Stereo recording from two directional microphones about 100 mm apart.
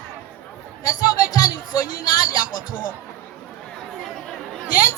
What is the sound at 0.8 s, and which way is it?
Music, 35° left (ahead or behind).